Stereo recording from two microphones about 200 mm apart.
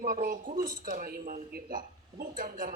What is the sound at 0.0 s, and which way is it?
Speech, 45° right (ahead or behind).